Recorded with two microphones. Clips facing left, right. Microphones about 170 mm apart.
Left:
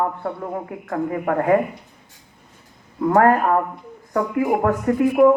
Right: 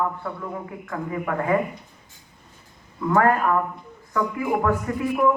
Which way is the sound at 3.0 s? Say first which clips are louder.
Left 4 dB; 45° left (ahead or behind).